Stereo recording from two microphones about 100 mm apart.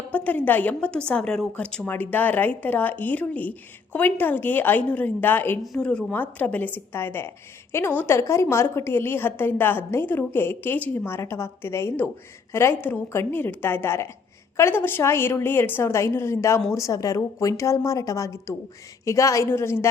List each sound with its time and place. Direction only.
0.1 s a woman's voice: 15° left (ahead or behind)
5.7 s a woman's voice: 10° left (ahead or behind); by 19.9 s 25° left (ahead or behind)